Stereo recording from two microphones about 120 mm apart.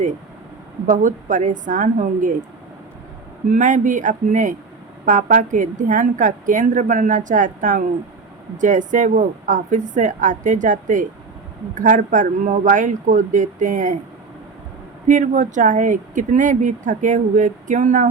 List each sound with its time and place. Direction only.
0.9 s speech: 90° right
3.5 s speech: 90° right
15.0 s speech: 90° right